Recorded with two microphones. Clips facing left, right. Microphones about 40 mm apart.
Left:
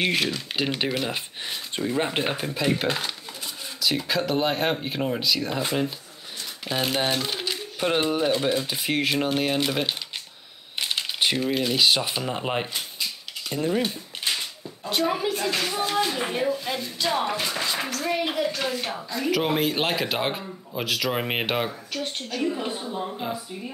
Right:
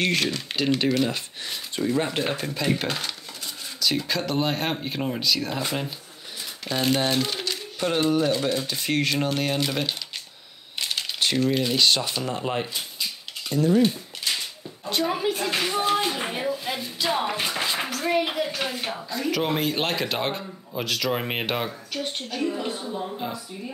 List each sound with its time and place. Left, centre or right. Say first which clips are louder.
0.0 s speech: even; centre
7.4 s speech: left 1 dB; centre
14.3 s a sound: even; left
14.9 s a woman's voice: even; centre
22.0 s a woman's voice: left 1 dB; centre
22.6 s speech: even; centre